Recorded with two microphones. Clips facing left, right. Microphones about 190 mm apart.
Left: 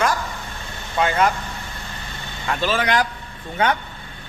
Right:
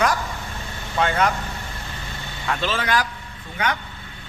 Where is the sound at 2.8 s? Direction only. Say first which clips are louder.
Left 3 dB; 20° left (ahead or behind).